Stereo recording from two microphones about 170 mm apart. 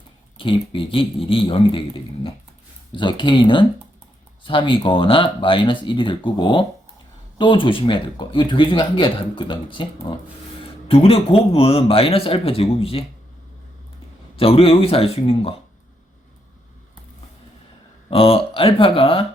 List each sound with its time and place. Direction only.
0.3 s speech: 30° left (ahead or behind)
2.9 s speech: 25° left (ahead or behind)
14.3 s speech: 35° left (ahead or behind)
18.1 s speech: 35° left (ahead or behind)